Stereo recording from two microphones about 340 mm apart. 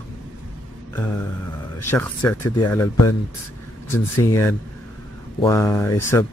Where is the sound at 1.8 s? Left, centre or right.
Centre.